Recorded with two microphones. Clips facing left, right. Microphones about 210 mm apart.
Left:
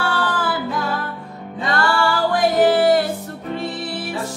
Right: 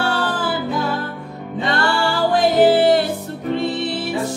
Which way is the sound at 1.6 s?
25° right (ahead or behind).